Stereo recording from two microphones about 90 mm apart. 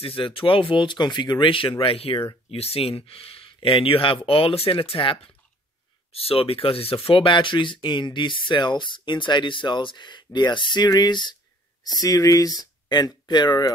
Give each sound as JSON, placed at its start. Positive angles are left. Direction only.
{"t": 0.0, "sound": "speech", "side_deg": 80}
{"t": 6.1, "sound": "speech", "side_deg": 90}
{"t": 12.0, "sound": "speech", "side_deg": 40}